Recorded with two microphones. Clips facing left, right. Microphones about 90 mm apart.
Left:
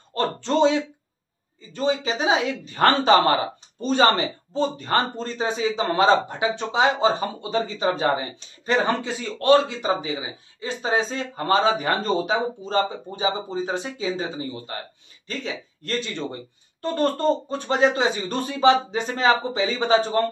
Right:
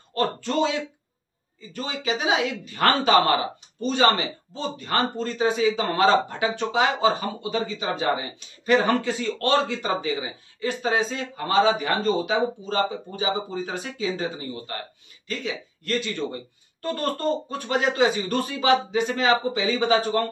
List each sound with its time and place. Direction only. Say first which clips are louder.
0.1 s a man's voice: left 2 dB; 30° left (ahead or behind)
15.2 s a man's voice: even; 30° left (ahead or behind)